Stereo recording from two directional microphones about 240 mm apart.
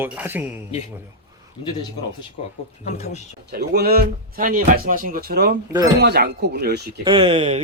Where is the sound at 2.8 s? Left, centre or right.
Left.